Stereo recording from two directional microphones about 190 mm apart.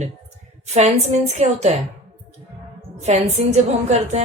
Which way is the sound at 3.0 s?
35° right (ahead or behind).